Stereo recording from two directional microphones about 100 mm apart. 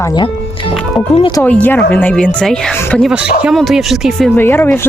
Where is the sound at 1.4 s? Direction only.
15° left (ahead or behind).